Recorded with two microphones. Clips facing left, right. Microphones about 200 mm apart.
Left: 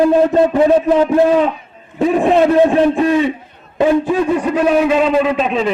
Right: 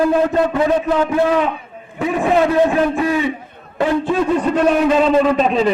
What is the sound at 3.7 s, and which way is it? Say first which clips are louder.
A man's voice: left 3 dB; 15° left (ahead or behind).